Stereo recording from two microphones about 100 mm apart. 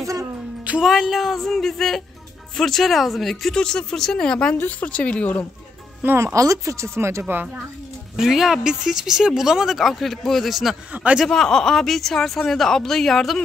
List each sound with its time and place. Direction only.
0.0 s music: 35° right (ahead or behind)
0.7 s speech: 5° right (ahead or behind); by 5.5 s 15° left (ahead or behind)
6.0 s speech: 30° right (ahead or behind)
8.2 s speech: 5° right (ahead or behind)
10.9 s speech: 15° right (ahead or behind)
11.2 s speech: 5° left (ahead or behind)